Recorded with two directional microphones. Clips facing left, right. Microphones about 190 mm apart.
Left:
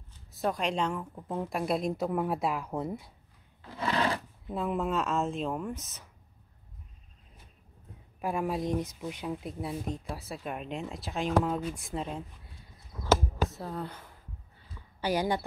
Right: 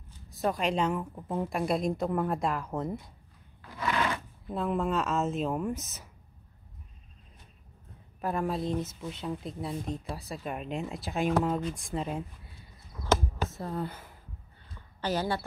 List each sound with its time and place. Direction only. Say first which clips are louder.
0.3 s speech: right 1 dB; centre (ahead or behind)
3.6 s a sound: left 1 dB; 30° left (ahead or behind)
4.5 s speech: right 1 dB; centre (ahead or behind)
8.2 s speech: even; 10° left (ahead or behind)
13.1 s a sound: left 2 dB; centre (ahead or behind)
15.0 s speech: left 2 dB; 10° left (ahead or behind)